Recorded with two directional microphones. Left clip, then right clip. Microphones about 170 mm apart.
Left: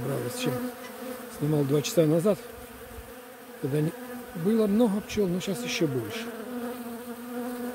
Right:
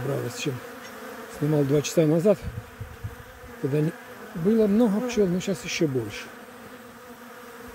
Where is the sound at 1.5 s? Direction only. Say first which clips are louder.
Right 3 dB; 15° right (ahead or behind).